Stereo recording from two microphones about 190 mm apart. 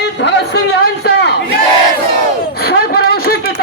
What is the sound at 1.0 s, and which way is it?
Battle cry, 60° left (ahead or behind).